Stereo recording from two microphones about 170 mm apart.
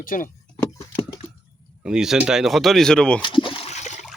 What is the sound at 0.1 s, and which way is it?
Speech, 50° left (ahead or behind).